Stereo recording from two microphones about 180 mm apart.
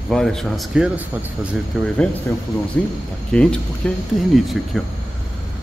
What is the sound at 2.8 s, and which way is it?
A man's voice, 10° left (ahead or behind).